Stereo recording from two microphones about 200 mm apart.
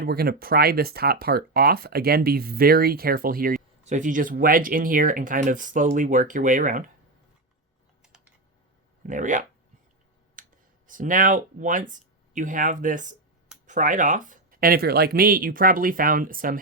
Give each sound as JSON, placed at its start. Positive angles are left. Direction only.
{"t": 0.0, "sound": "speech", "side_deg": -50}
{"t": 8.0, "sound": "typing", "side_deg": -5}
{"t": 9.0, "sound": "speech", "side_deg": -40}
{"t": 10.4, "sound": "a sound", "side_deg": -40}
{"t": 10.8, "sound": "speech", "side_deg": -40}